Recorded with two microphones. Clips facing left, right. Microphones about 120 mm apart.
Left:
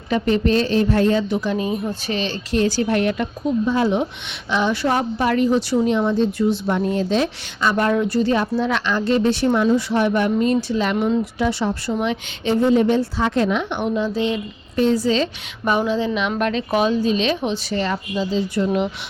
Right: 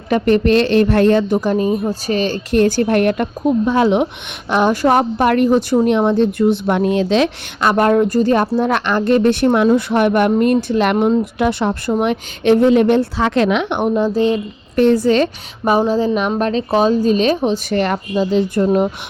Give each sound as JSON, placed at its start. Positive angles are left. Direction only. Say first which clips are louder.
{"t": 0.1, "sound": "a woman's voice", "louder": "right 5 dB", "side_deg": -60}
{"t": 1.3, "sound": "a woman's voice", "louder": "right 6 dB", "side_deg": -45}
{"t": 10.9, "sound": "a woman's voice", "louder": "right 4 dB", "side_deg": -40}
{"t": 11.3, "sound": "a woman's voice", "louder": "right 4 dB", "side_deg": -60}
{"t": 13.7, "sound": "speech", "louder": "right 6 dB", "side_deg": -50}
{"t": 14.8, "sound": "a woman's voice", "louder": "right 5 dB", "side_deg": -60}
{"t": 15.6, "sound": "a woman's voice", "louder": "right 5 dB", "side_deg": -35}
{"t": 17.7, "sound": "a woman's voice", "louder": "right 5 dB", "side_deg": -60}
{"t": 18.6, "sound": "speech", "louder": "right 5 dB", "side_deg": -45}